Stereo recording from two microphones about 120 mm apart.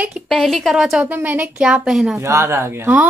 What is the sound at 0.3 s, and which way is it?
A woman's voice, centre (ahead or behind).